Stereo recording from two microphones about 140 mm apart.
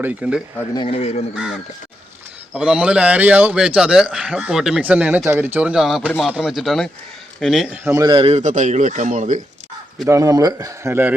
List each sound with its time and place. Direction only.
0.0 s a man's voice: 10° right (ahead or behind)
0.9 s a man's voice: 45° left (ahead or behind)
2.5 s a man's voice: 5° right (ahead or behind)
7.9 s a man's voice: 35° right (ahead or behind)
8.4 s speech: 60° right (ahead or behind)
10.1 s a man's voice: 25° right (ahead or behind)